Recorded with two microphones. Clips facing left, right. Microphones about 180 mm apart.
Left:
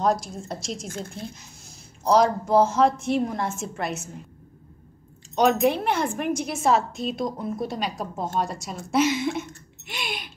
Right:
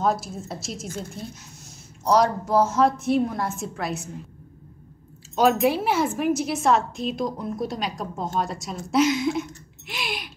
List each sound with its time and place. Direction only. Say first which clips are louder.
0.0 s a woman's voice: left 1 dB; centre (ahead or behind)
5.3 s a woman's voice: even; 5° right (ahead or behind)